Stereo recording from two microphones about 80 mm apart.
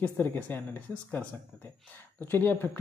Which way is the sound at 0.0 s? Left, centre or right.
Left.